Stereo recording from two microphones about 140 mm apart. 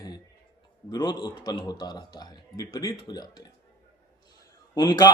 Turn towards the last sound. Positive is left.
turn(degrees=30)  # may be behind; listen again after turning